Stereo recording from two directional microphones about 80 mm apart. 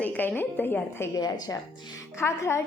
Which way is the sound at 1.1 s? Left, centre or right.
Left.